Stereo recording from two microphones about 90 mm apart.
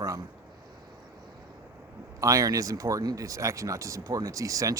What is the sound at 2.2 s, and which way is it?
Speech, 40° right (ahead or behind).